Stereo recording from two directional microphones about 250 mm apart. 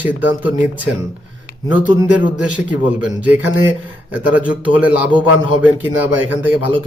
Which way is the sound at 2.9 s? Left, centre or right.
Centre.